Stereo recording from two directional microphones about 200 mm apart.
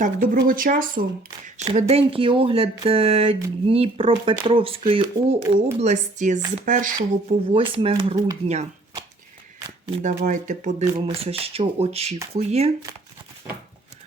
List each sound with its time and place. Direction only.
0.3 s speech: 45° right (ahead or behind)
1.5 s speech: 35° right (ahead or behind)
5.8 s speech: 35° right (ahead or behind)
7.3 s speech: 25° right (ahead or behind)
10.0 s speech: 40° right (ahead or behind)